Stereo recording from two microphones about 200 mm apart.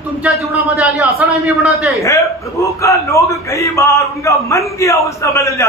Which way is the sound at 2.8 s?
15° left (ahead or behind).